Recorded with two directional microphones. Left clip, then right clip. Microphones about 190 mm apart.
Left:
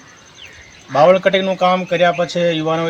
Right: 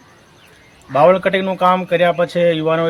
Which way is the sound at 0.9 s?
Centre (ahead or behind).